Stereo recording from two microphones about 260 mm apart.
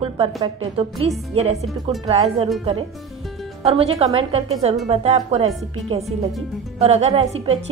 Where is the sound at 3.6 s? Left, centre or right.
Right.